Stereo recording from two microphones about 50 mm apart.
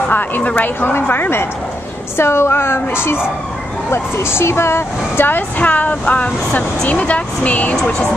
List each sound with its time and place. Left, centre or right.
0.1 s a woman's voice: left
2.1 s speech: left
5.6 s speech: left